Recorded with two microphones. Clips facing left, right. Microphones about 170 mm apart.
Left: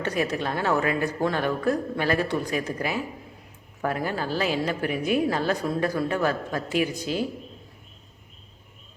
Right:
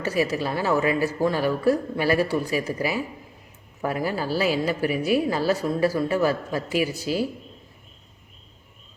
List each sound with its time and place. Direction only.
0.0 s a woman's voice: 5° right (ahead or behind)